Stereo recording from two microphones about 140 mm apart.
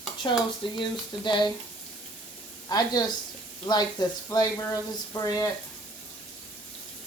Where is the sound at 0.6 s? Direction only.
35° left (ahead or behind).